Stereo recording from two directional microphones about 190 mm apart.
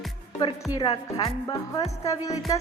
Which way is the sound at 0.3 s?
25° left (ahead or behind).